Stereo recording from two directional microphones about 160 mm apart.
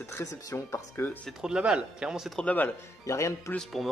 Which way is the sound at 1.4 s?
5° right (ahead or behind).